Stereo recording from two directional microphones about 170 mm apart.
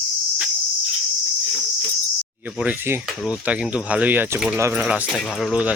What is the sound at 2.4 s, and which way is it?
Speech, 10° right (ahead or behind).